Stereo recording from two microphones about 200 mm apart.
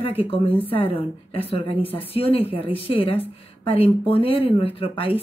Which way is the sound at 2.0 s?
30° left (ahead or behind).